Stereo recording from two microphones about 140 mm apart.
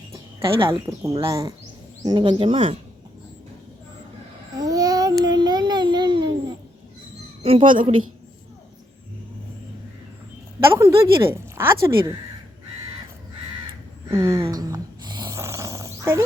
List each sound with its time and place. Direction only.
0.3 s speech: 40° right (ahead or behind)
0.9 s a woman's voice: 25° right (ahead or behind)
2.4 s speech: 40° right (ahead or behind)
4.5 s babbling: 25° right (ahead or behind)
7.4 s a woman's voice: 40° right (ahead or behind)
10.6 s a sound: 20° right (ahead or behind)
11.3 s a woman's voice: 20° right (ahead or behind)
14.1 s a woman's voice: 20° right (ahead or behind)
14.5 s a sound: 25° right (ahead or behind)